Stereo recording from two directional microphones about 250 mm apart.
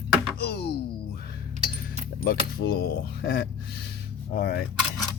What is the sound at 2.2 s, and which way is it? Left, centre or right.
Speech, left.